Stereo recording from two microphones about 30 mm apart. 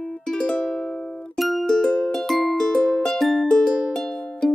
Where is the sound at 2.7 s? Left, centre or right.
Left.